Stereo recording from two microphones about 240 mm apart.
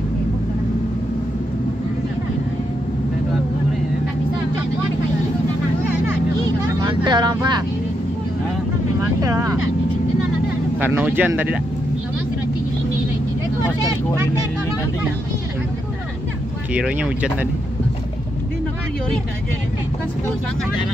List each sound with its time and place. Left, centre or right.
6.8 s vehicle: centre
9.2 s speech: centre
10.8 s speech: centre
16.7 s speech: centre